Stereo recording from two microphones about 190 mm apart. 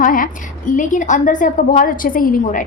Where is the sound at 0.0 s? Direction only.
45° left (ahead or behind).